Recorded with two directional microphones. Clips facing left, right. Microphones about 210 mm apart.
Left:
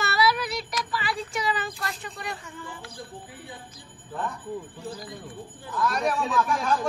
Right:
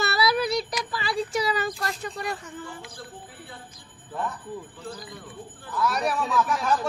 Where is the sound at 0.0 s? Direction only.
35° right (ahead or behind).